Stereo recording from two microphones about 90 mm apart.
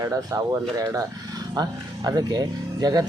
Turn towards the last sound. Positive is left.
turn(degrees=-50)  # may be behind; listen again after turning